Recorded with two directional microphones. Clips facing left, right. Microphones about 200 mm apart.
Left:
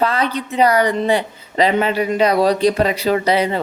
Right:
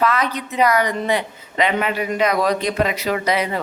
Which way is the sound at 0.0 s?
30° left (ahead or behind).